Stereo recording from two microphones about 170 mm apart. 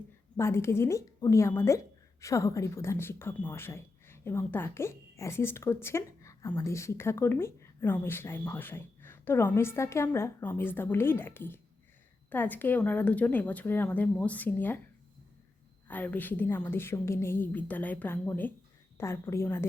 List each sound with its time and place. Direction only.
0.3 s speech: 15° left (ahead or behind)
15.9 s speech: 10° left (ahead or behind)